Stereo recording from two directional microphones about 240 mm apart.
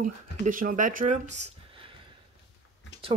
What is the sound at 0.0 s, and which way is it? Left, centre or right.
Speech, right.